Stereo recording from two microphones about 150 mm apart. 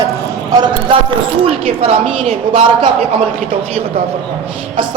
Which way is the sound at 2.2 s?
35° right (ahead or behind).